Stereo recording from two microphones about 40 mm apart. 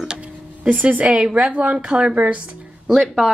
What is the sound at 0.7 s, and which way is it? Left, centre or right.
Speech, right.